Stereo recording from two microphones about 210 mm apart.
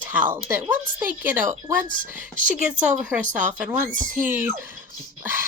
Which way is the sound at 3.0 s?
5° right (ahead or behind).